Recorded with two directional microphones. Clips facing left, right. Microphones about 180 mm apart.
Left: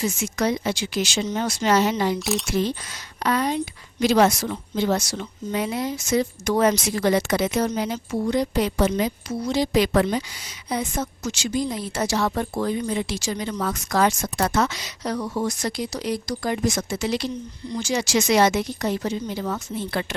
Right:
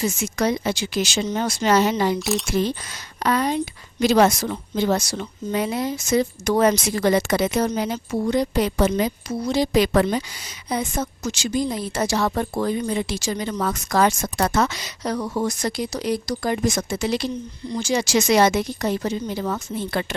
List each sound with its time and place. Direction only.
0.0 s speech: 40° right (ahead or behind)
2.1 s speech: centre (ahead or behind)
3.2 s a woman's voice: 45° right (ahead or behind)
17.7 s speech: 30° right (ahead or behind)